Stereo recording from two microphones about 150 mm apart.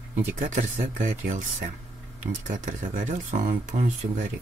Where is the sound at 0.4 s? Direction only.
55° right (ahead or behind).